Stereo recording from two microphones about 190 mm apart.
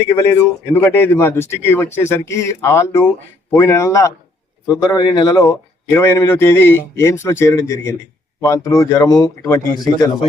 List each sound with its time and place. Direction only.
0.2 s a man's voice: 15° left (ahead or behind)